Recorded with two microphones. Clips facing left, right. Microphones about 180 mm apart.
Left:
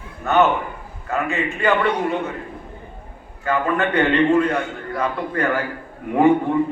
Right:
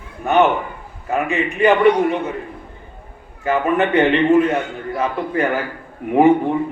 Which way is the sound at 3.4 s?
20° right (ahead or behind).